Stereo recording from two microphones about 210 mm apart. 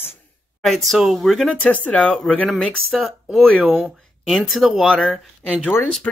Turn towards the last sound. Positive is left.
turn(degrees=5)  # may be behind; listen again after turning